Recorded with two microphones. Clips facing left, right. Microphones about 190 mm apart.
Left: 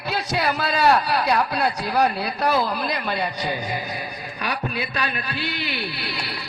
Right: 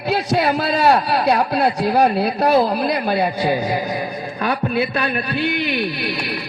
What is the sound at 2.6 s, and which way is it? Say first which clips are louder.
Speech: right 7 dB; 45° right (ahead or behind).